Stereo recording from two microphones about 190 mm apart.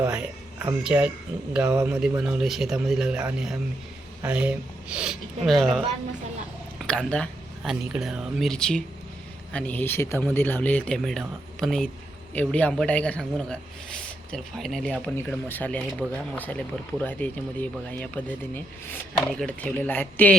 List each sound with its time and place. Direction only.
0.0 s speech: 5° right (ahead or behind)
6.8 s a man's voice: 5° left (ahead or behind)